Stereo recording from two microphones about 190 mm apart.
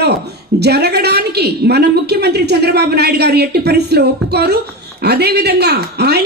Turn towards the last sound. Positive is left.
turn(degrees=-60)  # may be behind; listen again after turning